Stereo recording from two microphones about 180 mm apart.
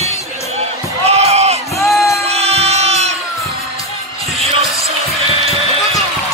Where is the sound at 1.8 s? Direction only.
Centre (ahead or behind).